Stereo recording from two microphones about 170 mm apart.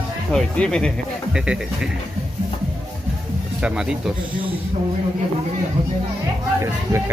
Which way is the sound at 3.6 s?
5° right (ahead or behind).